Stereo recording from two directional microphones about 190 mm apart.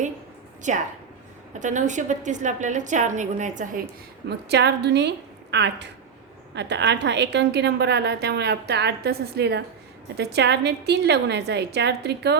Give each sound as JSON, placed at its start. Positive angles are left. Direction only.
{"t": 0.7, "sound": "a woman's voice", "side_deg": -40}
{"t": 4.3, "sound": "a woman's voice", "side_deg": -60}